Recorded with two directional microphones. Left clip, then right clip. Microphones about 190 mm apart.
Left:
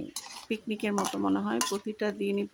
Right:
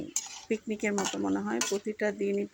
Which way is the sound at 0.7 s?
10° left (ahead or behind).